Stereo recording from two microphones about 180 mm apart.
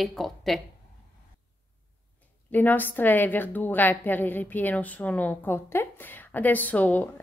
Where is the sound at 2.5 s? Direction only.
10° left (ahead or behind).